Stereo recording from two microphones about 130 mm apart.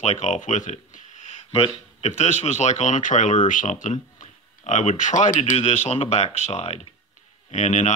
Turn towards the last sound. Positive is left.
turn(degrees=65)  # may be behind; listen again after turning